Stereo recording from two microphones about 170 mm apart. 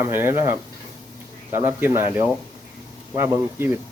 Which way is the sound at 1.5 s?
10° right (ahead or behind).